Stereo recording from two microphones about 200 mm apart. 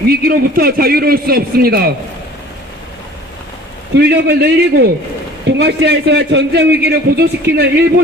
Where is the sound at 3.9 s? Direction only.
55° right (ahead or behind).